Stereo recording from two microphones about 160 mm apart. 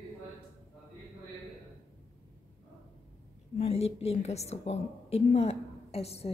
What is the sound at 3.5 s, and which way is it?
A woman's voice, 40° left (ahead or behind).